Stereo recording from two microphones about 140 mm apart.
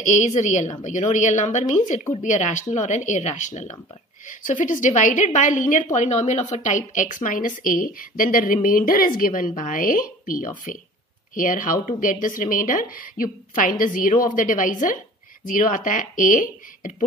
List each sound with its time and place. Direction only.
0.0 s a woman's voice: 55° left (ahead or behind)